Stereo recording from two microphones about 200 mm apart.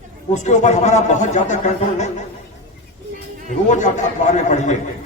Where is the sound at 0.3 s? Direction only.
35° left (ahead or behind).